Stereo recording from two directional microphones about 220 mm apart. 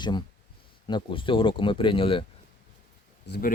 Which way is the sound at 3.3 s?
40° left (ahead or behind).